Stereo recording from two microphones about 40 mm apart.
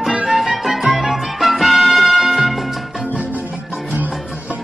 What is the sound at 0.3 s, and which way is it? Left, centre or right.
Music, centre.